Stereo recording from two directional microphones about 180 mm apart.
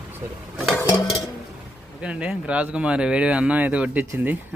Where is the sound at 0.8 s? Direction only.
25° left (ahead or behind).